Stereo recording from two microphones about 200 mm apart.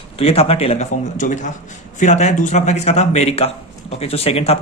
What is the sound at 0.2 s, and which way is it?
Speech, 30° left (ahead or behind).